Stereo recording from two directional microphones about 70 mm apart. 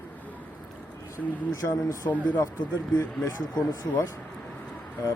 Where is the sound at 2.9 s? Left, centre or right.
Left.